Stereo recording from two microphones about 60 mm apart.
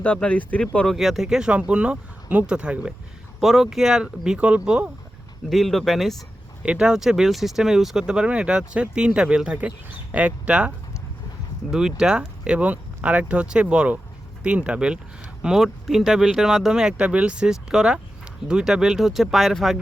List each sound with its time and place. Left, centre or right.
0.0 s speech: centre
0.9 s speech: centre
1.5 s speech: centre
3.4 s speech: centre
5.5 s speech: centre
6.6 s speech: centre
11.7 s speech: centre